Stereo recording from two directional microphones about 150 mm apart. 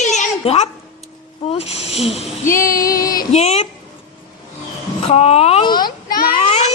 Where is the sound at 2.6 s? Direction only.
70° left (ahead or behind).